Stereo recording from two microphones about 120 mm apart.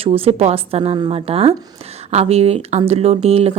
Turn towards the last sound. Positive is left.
turn(degrees=-60)  # may be behind; listen again after turning